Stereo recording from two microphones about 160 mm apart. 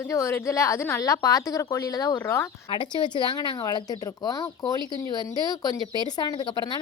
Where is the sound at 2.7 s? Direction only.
30° left (ahead or behind).